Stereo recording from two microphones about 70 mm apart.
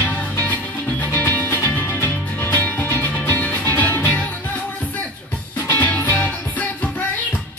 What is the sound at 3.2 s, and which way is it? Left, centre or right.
Music, left.